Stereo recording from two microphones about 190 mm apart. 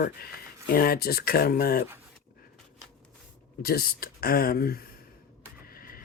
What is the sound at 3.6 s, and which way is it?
Speech, 55° left (ahead or behind).